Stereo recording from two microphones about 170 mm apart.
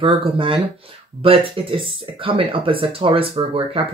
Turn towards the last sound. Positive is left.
turn(degrees=-35)  # may be behind; listen again after turning